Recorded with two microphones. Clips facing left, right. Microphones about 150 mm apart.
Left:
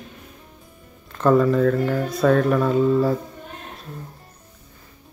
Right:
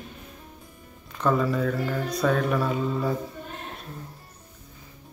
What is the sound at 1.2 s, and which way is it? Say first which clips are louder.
Speech: left 7 dB; centre (ahead or behind).